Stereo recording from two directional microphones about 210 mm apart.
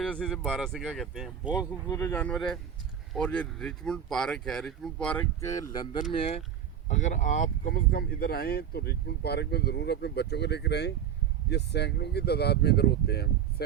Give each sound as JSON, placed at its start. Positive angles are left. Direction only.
{"t": 0.0, "sound": "speech", "side_deg": 5}
{"t": 1.9, "sound": "speech", "side_deg": 15}
{"t": 6.8, "sound": "speech", "side_deg": 35}